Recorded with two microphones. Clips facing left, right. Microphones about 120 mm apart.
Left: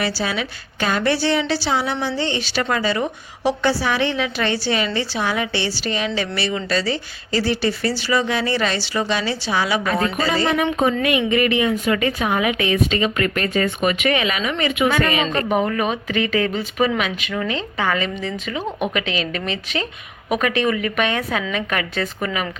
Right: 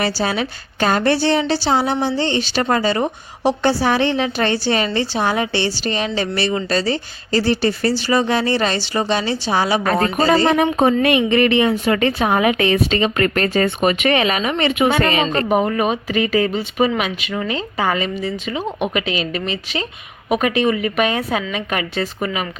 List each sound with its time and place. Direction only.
0.2 s a woman's voice: 35° right (ahead or behind)
7.7 s a woman's voice: 45° right (ahead or behind); by 18.1 s 30° right (ahead or behind)
20.6 s speech: 25° right (ahead or behind)